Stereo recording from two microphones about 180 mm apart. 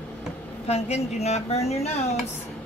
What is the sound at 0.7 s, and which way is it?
Speech, 35° left (ahead or behind).